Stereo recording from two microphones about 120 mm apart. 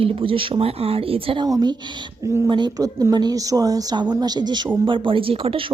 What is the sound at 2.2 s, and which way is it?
Speech, 20° right (ahead or behind).